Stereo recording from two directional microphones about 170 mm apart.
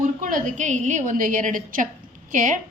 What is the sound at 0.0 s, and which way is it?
A woman's voice, 50° right (ahead or behind).